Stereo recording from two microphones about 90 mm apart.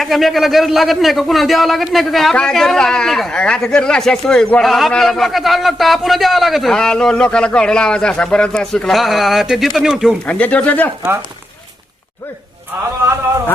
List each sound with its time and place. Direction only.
0.0 s a man's voice: centre (ahead or behind)
10.2 s speech: 15° left (ahead or behind)